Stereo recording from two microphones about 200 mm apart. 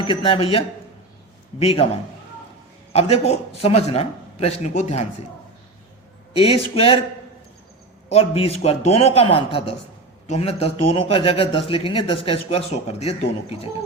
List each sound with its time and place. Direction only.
0.0 s a man's voice: 25° left (ahead or behind)
2.9 s a man's voice: 30° left (ahead or behind)
6.3 s a man's voice: 30° left (ahead or behind)
8.1 s a man's voice: 30° left (ahead or behind)